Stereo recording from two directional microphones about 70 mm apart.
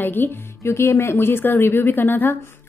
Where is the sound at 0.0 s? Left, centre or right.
Left.